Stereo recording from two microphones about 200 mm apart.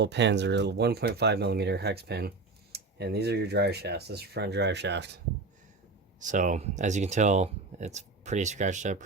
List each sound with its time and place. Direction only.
0.0 s speech: 60° right (ahead or behind)
6.1 s speech: 40° right (ahead or behind)